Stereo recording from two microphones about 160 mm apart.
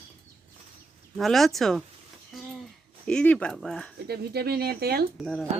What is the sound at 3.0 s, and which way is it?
Speech, 5° left (ahead or behind).